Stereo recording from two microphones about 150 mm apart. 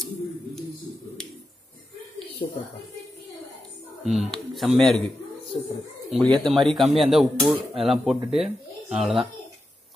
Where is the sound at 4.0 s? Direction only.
Centre (ahead or behind).